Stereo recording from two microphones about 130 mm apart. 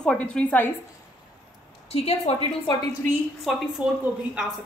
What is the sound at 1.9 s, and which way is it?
Speech, 55° left (ahead or behind).